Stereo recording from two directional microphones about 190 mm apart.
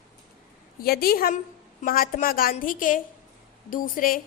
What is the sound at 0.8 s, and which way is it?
A woman's voice, 55° left (ahead or behind).